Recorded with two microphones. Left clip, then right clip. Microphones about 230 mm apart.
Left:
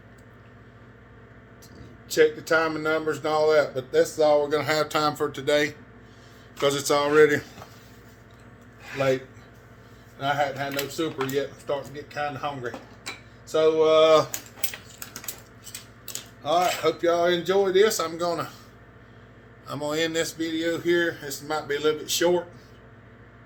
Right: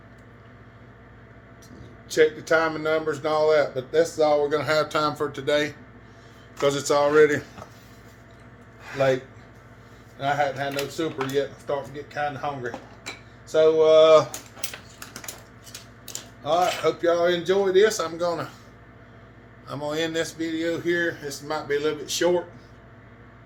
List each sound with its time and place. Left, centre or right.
2.0 s speech: centre
10.2 s speech: centre
16.4 s speech: left
19.6 s speech: left